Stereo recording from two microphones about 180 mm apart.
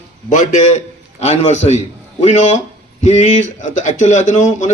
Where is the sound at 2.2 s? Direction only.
40° left (ahead or behind).